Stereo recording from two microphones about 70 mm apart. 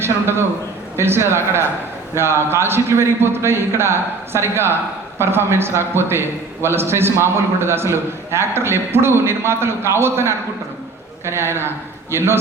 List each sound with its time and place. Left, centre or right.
0.0 s a man's voice: right